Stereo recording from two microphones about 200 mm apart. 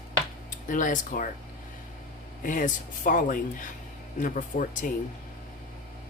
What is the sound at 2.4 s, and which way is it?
Speech, 40° left (ahead or behind).